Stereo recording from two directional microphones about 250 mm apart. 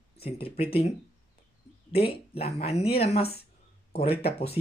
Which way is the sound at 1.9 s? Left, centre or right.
Left.